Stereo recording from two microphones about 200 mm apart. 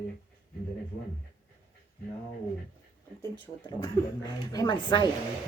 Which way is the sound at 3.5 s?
25° left (ahead or behind).